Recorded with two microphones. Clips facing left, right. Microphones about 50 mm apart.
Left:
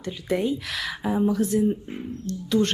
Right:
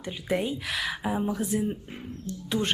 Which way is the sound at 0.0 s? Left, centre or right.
Centre.